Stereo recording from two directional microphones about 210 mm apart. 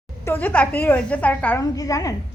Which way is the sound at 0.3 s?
10° left (ahead or behind).